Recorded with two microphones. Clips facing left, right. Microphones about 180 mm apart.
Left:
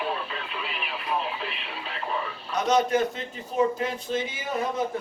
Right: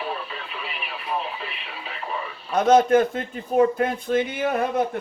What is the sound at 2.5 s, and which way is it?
Speech, 55° right (ahead or behind).